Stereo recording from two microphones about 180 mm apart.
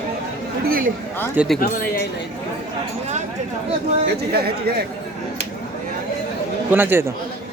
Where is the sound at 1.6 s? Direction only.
50° left (ahead or behind).